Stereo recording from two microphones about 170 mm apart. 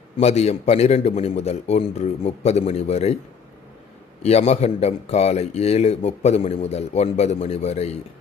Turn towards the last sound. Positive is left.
turn(degrees=40)  # may be behind; listen again after turning